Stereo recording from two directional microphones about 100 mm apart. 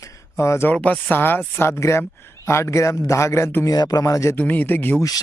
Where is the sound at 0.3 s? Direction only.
30° left (ahead or behind).